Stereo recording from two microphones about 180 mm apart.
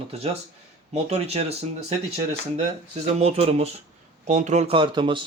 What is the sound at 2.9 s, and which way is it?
Speech, 35° right (ahead or behind).